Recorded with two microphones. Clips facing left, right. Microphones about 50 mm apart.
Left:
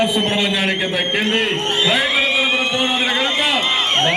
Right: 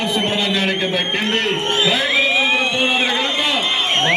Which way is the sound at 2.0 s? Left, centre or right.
Centre.